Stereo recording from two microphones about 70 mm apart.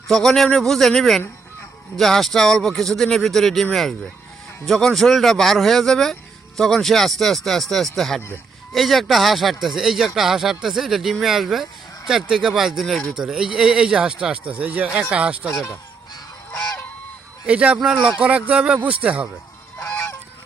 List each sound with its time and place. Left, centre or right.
0.1 s speech: centre
17.4 s a man's voice: centre
17.7 s speech: centre
18.2 s speech: centre
19.8 s goose: left